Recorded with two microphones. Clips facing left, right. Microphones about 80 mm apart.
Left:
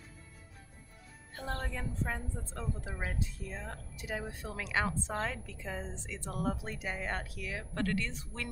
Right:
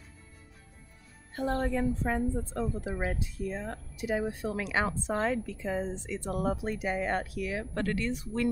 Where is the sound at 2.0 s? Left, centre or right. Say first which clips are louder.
Right 10 dB; right.